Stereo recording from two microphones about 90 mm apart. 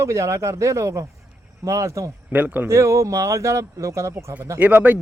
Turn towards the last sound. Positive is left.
turn(degrees=-20)  # may be behind; listen again after turning